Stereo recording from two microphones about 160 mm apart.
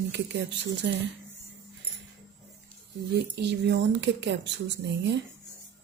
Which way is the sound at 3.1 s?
90° right.